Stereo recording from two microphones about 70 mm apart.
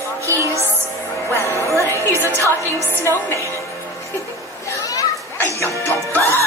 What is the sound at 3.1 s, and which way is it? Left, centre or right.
Speech, left.